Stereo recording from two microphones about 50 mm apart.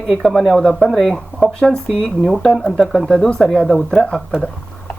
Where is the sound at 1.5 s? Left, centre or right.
Centre.